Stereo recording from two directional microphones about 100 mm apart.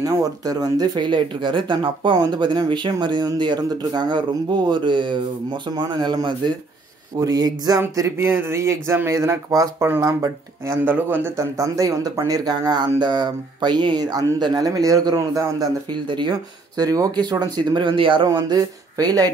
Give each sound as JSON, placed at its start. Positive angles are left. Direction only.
{"t": 0.0, "sound": "speech", "side_deg": -35}
{"t": 15.9, "sound": "speech", "side_deg": -50}
{"t": 18.2, "sound": "speech", "side_deg": -40}